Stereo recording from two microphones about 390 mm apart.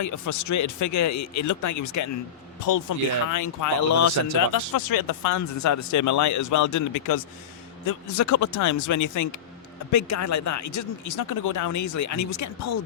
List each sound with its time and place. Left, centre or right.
0.0 s speech: left
4.5 s speech: left